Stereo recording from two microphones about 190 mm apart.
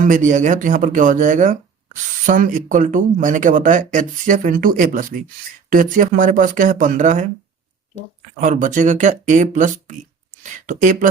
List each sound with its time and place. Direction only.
0.0 s speech: 40° right (ahead or behind)
8.4 s speech: 40° right (ahead or behind)